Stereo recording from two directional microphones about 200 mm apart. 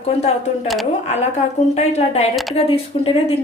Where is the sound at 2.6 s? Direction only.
30° left (ahead or behind).